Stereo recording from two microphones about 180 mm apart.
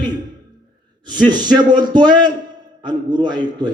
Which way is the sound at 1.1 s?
25° right (ahead or behind).